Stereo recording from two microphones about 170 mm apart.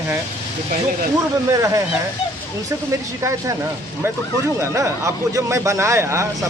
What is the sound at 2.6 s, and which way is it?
Speech, 20° right (ahead or behind).